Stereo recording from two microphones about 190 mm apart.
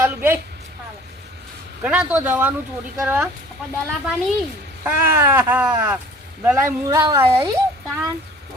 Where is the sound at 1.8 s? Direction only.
5° right (ahead or behind).